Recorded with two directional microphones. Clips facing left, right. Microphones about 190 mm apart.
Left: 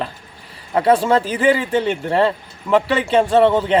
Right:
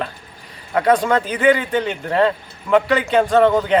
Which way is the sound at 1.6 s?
30° left (ahead or behind).